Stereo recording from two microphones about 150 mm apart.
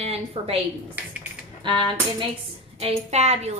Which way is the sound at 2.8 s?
45° right (ahead or behind).